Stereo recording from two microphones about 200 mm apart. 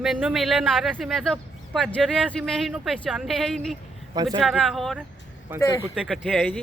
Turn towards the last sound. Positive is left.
turn(degrees=5)  # may be behind; listen again after turning